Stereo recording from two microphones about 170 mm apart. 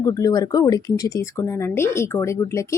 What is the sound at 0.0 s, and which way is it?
A woman's voice, 20° left (ahead or behind).